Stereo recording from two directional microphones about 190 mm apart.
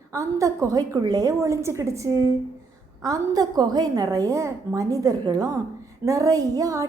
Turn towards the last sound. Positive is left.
turn(degrees=-15)  # may be behind; listen again after turning